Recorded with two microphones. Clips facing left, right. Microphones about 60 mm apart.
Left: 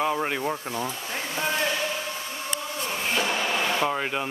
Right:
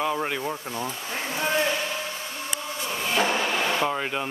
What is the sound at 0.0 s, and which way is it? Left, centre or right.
Speech, centre.